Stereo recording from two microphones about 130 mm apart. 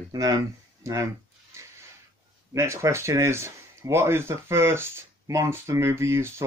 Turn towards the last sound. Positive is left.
turn(degrees=-20)  # may be behind; listen again after turning